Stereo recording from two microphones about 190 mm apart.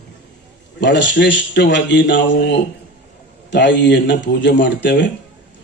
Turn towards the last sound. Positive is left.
turn(degrees=70)  # may be behind; listen again after turning